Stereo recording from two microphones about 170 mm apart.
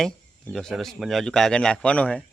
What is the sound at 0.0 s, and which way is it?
Speech, 5° left (ahead or behind).